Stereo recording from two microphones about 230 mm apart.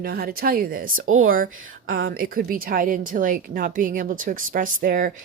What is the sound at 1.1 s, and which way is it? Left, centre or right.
A woman's voice, right.